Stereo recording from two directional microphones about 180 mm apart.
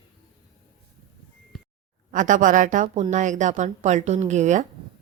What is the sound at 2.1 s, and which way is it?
Speech, 45° right (ahead or behind).